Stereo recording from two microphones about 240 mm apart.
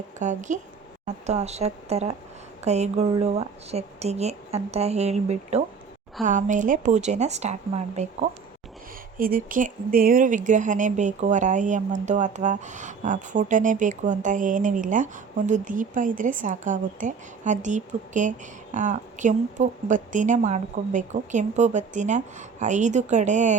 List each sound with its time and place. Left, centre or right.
0.2 s speech: right